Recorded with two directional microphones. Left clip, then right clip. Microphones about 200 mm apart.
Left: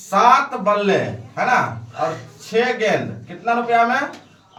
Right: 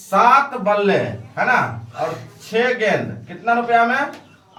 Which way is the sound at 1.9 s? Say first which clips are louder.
Left 1 dB; 15° right (ahead or behind).